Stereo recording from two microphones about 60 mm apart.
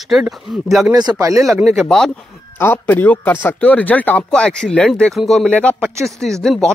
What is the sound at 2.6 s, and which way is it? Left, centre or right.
Speech, left.